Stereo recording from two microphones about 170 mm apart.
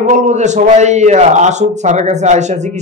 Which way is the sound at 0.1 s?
45° right (ahead or behind).